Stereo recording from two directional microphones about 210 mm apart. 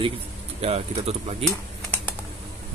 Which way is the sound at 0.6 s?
30° right (ahead or behind).